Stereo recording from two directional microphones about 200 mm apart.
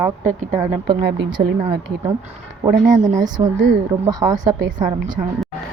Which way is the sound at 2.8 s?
40° right (ahead or behind).